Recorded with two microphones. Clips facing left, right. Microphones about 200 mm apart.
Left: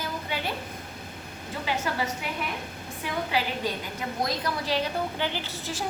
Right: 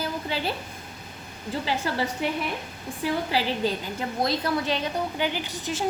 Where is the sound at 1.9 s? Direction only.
30° right (ahead or behind).